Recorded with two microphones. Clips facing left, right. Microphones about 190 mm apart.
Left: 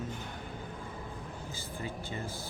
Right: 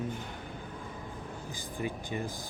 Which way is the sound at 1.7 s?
15° right (ahead or behind).